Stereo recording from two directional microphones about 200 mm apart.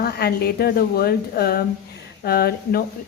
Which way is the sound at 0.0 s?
50° left (ahead or behind).